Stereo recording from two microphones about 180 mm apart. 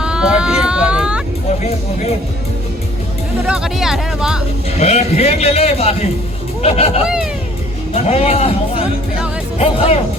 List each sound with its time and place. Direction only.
0.0 s a sound: 5° right (ahead or behind)
3.4 s speech: 5° right (ahead or behind)
4.8 s a man's voice: 35° left (ahead or behind)
9.6 s a man's voice: 35° left (ahead or behind)